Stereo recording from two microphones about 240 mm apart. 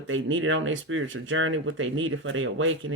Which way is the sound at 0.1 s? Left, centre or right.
Right.